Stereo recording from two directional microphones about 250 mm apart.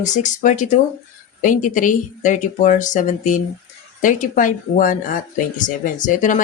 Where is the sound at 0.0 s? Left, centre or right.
Left.